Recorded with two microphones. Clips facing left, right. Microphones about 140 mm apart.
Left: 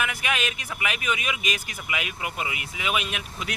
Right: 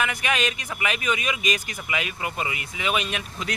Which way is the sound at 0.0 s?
5° left (ahead or behind).